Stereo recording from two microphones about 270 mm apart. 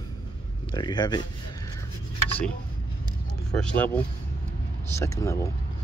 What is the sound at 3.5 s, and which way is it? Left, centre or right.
Speech, centre.